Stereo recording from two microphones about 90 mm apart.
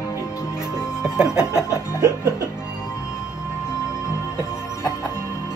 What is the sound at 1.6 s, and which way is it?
Music, 30° left (ahead or behind).